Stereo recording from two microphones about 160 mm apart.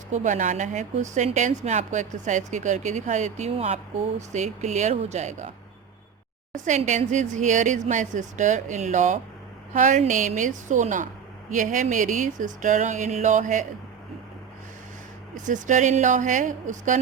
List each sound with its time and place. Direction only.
0.1 s a woman's voice: 50° right (ahead or behind)
6.7 s a woman's voice: 50° right (ahead or behind)
15.4 s a woman's voice: 50° right (ahead or behind)